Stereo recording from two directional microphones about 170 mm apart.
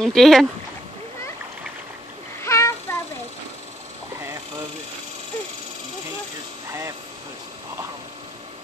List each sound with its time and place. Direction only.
0.0 s speech: centre (ahead or behind)
2.4 s child singing: 15° left (ahead or behind)